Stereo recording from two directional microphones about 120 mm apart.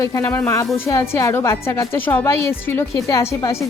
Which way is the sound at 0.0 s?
25° left (ahead or behind).